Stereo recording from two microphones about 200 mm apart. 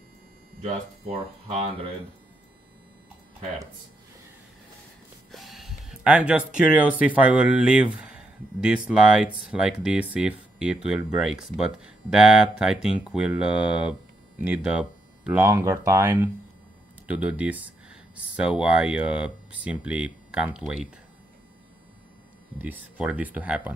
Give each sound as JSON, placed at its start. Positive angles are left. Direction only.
{"t": 0.7, "sound": "speech", "side_deg": -30}
{"t": 5.3, "sound": "speech", "side_deg": 0}
{"t": 22.6, "sound": "speech", "side_deg": -10}